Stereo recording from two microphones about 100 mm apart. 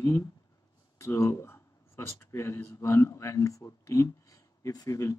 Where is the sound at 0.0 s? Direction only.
35° left (ahead or behind).